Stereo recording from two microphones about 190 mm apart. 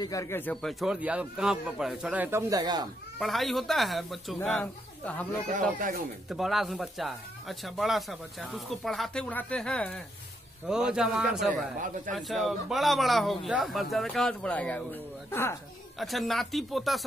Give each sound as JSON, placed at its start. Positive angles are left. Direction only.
{"t": 0.0, "sound": "speech", "side_deg": 15}
{"t": 3.2, "sound": "speech", "side_deg": 0}
{"t": 5.5, "sound": "speech", "side_deg": -40}
{"t": 6.2, "sound": "speech", "side_deg": 0}
{"t": 10.7, "sound": "speech", "side_deg": -5}
{"t": 16.0, "sound": "speech", "side_deg": 0}